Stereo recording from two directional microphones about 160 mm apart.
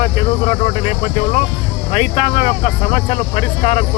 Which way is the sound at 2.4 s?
40° left (ahead or behind).